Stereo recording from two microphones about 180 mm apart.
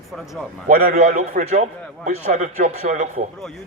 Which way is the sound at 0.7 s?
55° right (ahead or behind).